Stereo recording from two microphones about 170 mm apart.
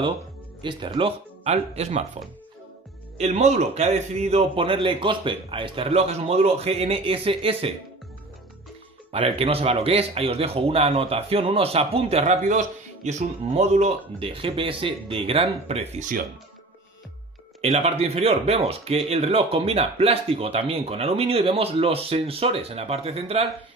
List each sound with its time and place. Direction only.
0.6 s speech: 30° right (ahead or behind)
9.1 s speech: 35° right (ahead or behind)
17.6 s speech: 35° right (ahead or behind)